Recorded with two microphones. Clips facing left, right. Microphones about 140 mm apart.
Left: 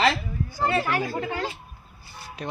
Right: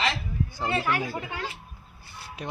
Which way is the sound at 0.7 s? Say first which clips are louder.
Left 1 dB; 35° left (ahead or behind).